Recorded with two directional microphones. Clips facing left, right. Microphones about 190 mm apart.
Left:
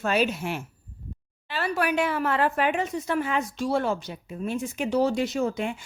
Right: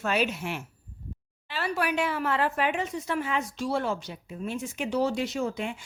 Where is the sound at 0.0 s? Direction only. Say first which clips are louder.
Left 3 dB; 40° left (ahead or behind).